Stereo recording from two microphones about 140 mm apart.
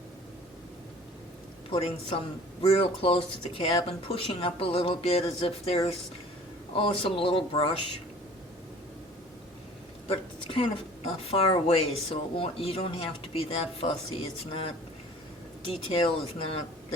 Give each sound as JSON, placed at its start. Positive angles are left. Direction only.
{"t": 1.7, "sound": "speech", "side_deg": 45}
{"t": 10.1, "sound": "speech", "side_deg": 40}
{"t": 15.7, "sound": "speech", "side_deg": 45}